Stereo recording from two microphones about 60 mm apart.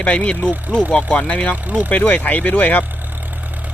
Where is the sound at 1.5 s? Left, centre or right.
Right.